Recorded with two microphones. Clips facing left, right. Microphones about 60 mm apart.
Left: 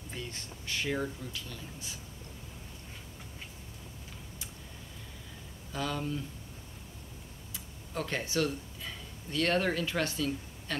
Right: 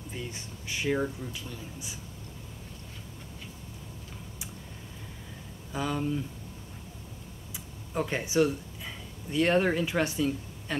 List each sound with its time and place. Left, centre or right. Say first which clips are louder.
0.1 s speech: right 2 dB; centre
5.7 s speech: right 4 dB; centre
7.5 s speech: right 5 dB; centre